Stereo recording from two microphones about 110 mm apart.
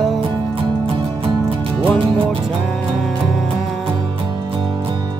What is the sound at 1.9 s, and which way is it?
Music, 55° right (ahead or behind).